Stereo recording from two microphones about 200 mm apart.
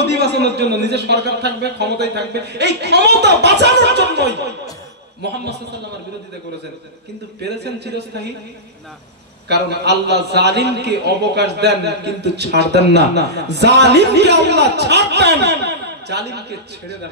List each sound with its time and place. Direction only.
0.0 s a man's voice: 55° right (ahead or behind)
7.4 s a man's voice: 55° right (ahead or behind)
9.5 s a man's voice: 55° right (ahead or behind)